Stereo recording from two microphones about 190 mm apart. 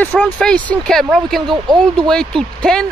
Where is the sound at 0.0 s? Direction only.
5° left (ahead or behind).